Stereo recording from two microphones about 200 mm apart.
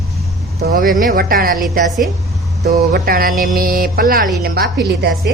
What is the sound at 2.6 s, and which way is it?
Speech, 50° right (ahead or behind).